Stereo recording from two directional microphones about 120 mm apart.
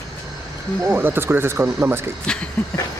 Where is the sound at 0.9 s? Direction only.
15° right (ahead or behind).